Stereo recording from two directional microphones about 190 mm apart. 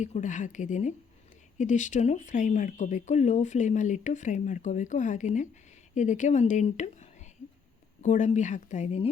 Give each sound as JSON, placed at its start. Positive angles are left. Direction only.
{"t": 0.0, "sound": "speech", "side_deg": 40}